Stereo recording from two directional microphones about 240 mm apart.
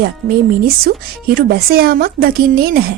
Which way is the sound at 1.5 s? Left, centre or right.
Right.